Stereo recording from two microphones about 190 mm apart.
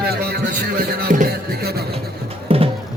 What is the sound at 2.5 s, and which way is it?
Music, 30° right (ahead or behind).